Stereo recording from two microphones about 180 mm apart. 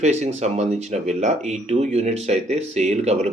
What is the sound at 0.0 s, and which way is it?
Speech, 40° right (ahead or behind).